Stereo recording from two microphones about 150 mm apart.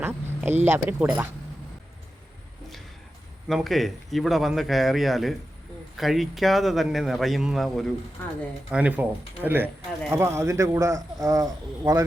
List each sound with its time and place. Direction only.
0.0 s speech: 15° right (ahead or behind)
3.5 s a man's voice: centre (ahead or behind); by 12.0 s 20° right (ahead or behind)